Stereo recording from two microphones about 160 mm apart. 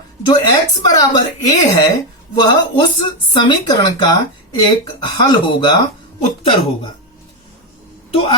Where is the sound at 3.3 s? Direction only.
25° left (ahead or behind).